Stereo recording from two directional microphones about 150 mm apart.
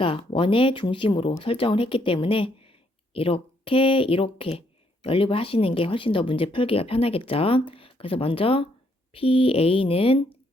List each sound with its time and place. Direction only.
0.0 s speech: 35° left (ahead or behind)